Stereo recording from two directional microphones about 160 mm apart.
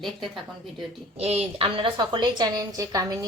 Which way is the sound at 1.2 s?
40° right (ahead or behind).